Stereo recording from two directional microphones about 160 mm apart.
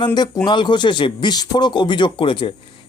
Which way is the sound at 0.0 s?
25° left (ahead or behind).